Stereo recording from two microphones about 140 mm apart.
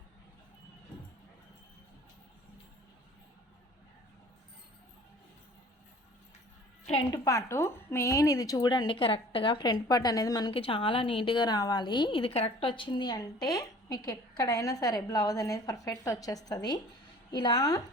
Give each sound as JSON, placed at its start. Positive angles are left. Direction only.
{"t": 7.1, "sound": "a woman's voice", "side_deg": 20}
{"t": 10.5, "sound": "a woman's voice", "side_deg": 40}